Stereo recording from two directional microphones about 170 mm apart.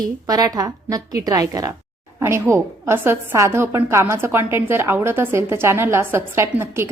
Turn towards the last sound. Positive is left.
turn(degrees=-15)  # may be behind; listen again after turning